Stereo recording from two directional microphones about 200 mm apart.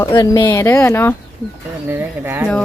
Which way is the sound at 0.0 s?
15° left (ahead or behind).